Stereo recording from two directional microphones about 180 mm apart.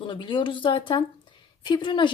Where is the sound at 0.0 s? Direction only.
25° left (ahead or behind).